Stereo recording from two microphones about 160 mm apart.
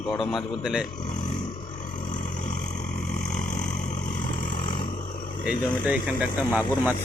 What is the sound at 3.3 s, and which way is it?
Vehicle, 50° left (ahead or behind).